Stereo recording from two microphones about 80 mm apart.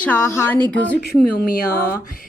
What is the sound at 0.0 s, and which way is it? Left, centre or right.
Speech, left.